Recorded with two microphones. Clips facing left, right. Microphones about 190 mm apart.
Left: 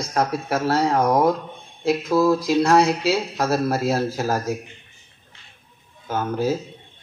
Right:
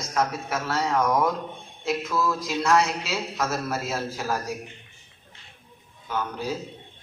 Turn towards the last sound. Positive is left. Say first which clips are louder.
# left 7 dB
turn(degrees=45)  # may be behind; listen again after turning